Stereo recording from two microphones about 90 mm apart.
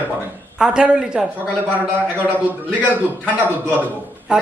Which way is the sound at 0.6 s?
10° right (ahead or behind).